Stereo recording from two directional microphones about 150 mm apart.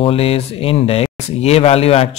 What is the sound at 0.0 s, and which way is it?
Speech, 40° left (ahead or behind).